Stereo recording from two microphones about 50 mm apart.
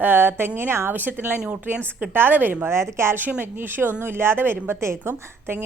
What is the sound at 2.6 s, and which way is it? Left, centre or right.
Speech, right.